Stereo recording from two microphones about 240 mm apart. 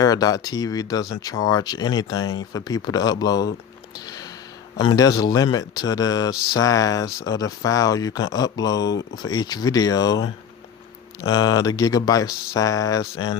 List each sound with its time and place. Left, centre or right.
0.0 s speech: centre
4.0 s a sound: centre
4.8 s speech: centre